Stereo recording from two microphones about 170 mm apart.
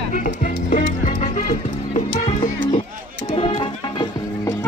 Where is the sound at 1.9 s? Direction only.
40° left (ahead or behind).